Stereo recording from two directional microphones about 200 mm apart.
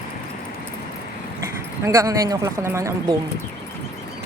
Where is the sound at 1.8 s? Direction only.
15° right (ahead or behind).